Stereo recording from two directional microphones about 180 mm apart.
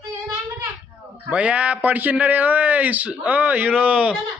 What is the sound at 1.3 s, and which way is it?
A man's voice, 5° right (ahead or behind).